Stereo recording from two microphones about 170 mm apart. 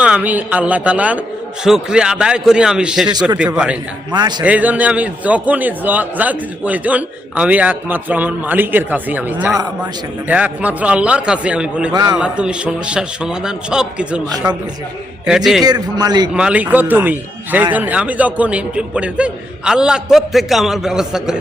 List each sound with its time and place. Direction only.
0.0 s a man's voice: 10° right (ahead or behind)
4.1 s a man's voice: 25° right (ahead or behind)
4.4 s a man's voice: 10° right (ahead or behind)
15.6 s a man's voice: 25° right (ahead or behind)
16.3 s a man's voice: 5° right (ahead or behind)